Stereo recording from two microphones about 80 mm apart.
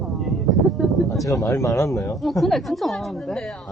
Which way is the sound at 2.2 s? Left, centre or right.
Centre.